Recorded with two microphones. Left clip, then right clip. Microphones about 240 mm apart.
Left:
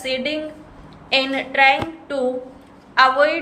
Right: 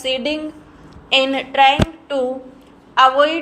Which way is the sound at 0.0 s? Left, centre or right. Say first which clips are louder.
Right 2 dB; centre.